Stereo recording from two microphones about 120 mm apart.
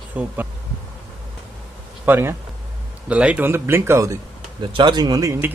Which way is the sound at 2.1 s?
20° right (ahead or behind).